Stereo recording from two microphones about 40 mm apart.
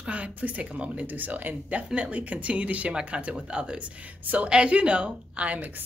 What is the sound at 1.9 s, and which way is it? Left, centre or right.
Speech, right.